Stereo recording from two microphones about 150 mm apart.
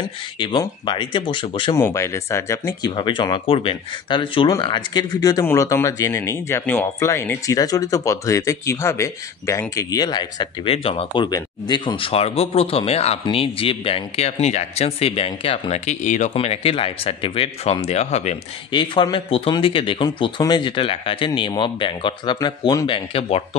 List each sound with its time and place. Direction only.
0.0 s speech: 30° left (ahead or behind)
1.8 s speech: 20° left (ahead or behind)
3.0 s speech: 30° left (ahead or behind)
11.2 s speech: 30° left (ahead or behind); by 18.4 s 45° left (ahead or behind)
18.7 s speech: 35° left (ahead or behind)